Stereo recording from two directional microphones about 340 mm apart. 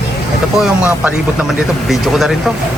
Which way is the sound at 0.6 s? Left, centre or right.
Centre.